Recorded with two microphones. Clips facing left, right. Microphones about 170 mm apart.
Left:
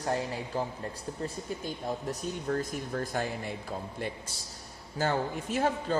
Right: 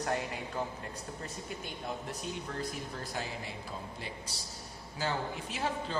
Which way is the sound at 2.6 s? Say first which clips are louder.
Left 6 dB; 50° left (ahead or behind).